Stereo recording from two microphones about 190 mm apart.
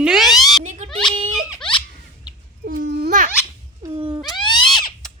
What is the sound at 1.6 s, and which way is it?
Giggle, 25° left (ahead or behind).